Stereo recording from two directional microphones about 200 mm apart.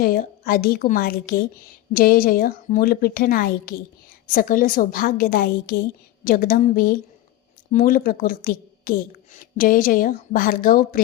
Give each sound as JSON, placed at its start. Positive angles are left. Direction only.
{"t": 0.0, "sound": "a woman's voice", "side_deg": 45}